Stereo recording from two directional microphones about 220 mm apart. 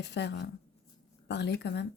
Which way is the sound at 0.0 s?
50° left (ahead or behind).